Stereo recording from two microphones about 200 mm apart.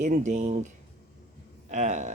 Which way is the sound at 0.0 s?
40° right (ahead or behind).